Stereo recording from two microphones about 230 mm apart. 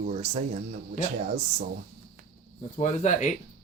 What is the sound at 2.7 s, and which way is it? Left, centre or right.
Speech, left.